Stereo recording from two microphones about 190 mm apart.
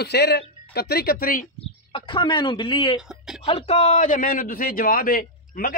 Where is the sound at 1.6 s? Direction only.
25° left (ahead or behind).